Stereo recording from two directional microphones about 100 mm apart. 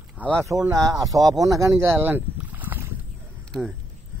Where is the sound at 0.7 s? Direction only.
40° right (ahead or behind); by 2.9 s 20° right (ahead or behind).